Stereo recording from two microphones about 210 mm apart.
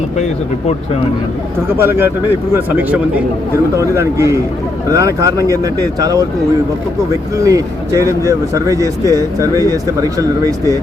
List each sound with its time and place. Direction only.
1.8 s speech: 10° right (ahead or behind)
7.3 s speech: 15° right (ahead or behind)